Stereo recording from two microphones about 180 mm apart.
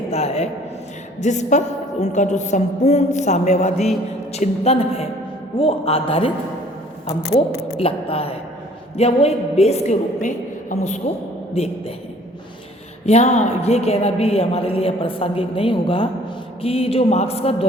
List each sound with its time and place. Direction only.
0.1 s a woman's voice: 35° left (ahead or behind)
7.3 s a woman's voice: 35° left (ahead or behind)
13.1 s a woman's voice: 35° left (ahead or behind)